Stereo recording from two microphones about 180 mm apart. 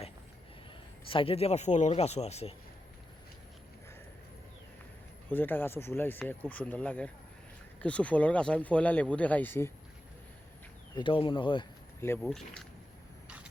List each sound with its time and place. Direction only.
1.0 s speech: 30° left (ahead or behind)
5.3 s speech: 10° left (ahead or behind)
10.9 s speech: 30° left (ahead or behind)
11.9 s speech: 15° left (ahead or behind)
12.2 s speech: centre (ahead or behind)
13.2 s vehicle: 5° right (ahead or behind)